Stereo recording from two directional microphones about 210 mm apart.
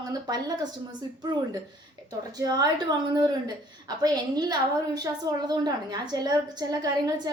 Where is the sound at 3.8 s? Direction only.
20° right (ahead or behind).